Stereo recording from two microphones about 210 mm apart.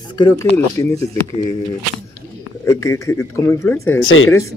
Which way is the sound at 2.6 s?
15° left (ahead or behind).